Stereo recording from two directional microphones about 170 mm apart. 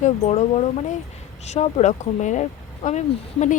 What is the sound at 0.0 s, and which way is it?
Speech, 40° left (ahead or behind).